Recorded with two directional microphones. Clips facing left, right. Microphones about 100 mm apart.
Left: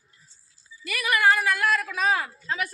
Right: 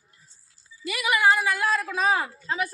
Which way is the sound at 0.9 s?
20° right (ahead or behind).